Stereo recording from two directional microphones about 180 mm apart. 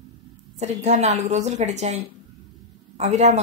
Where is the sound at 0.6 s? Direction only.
40° right (ahead or behind).